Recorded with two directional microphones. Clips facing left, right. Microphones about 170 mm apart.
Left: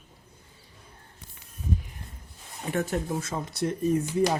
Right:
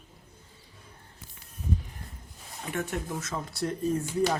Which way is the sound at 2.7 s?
40° left (ahead or behind).